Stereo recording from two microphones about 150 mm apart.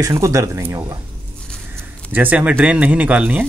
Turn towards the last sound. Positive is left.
turn(degrees=-10)  # may be behind; listen again after turning